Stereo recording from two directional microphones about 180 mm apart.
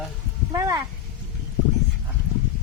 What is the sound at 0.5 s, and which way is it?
Speech, 20° right (ahead or behind).